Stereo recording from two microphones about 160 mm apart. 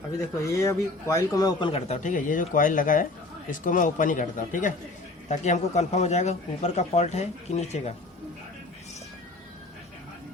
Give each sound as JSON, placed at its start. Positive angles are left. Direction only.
{"t": 0.2, "sound": "a man's voice", "side_deg": 20}
{"t": 1.7, "sound": "speech", "side_deg": 45}